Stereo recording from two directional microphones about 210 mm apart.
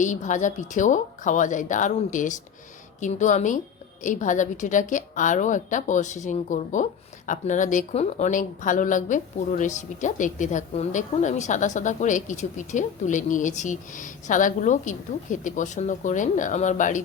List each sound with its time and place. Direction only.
0.0 s speech: 35° left (ahead or behind)